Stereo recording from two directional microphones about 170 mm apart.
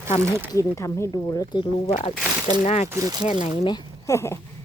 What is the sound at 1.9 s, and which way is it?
Speech, 40° left (ahead or behind).